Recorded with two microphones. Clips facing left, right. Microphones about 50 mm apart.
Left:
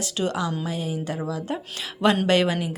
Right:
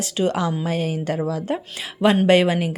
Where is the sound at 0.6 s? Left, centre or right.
Right.